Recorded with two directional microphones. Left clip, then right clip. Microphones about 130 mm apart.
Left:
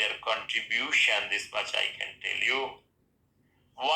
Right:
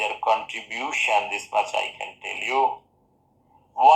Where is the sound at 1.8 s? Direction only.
35° right (ahead or behind).